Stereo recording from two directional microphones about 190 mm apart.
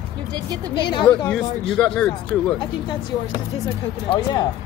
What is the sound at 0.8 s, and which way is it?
Speech, 25° left (ahead or behind).